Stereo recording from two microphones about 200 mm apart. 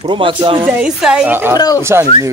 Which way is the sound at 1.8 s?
10° right (ahead or behind).